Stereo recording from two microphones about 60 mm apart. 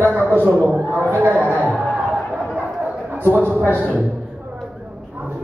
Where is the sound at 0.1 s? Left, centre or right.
Right.